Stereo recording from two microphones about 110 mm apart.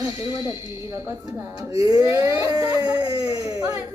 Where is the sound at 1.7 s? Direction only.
35° right (ahead or behind).